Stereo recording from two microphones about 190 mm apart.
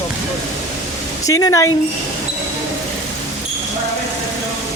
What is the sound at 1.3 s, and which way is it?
Speech, 20° left (ahead or behind).